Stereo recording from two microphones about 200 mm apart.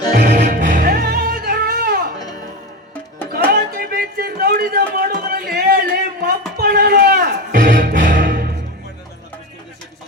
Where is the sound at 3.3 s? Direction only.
50° right (ahead or behind).